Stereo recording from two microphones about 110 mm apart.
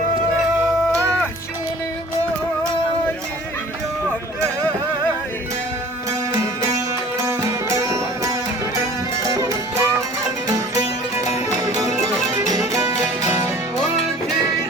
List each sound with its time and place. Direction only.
7.3 s music: 25° right (ahead or behind)
12.3 s music: 30° right (ahead or behind)